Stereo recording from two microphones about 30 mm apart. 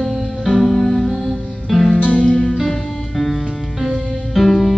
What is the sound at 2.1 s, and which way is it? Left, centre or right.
Music, left.